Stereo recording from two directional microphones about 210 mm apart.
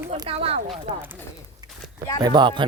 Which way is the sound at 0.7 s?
10° right (ahead or behind).